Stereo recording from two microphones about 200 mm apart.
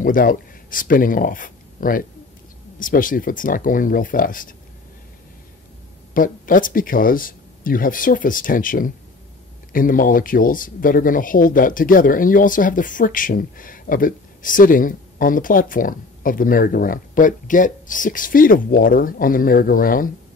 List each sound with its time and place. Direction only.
0.0 s speech: 45° left (ahead or behind)
6.1 s speech: 45° left (ahead or behind)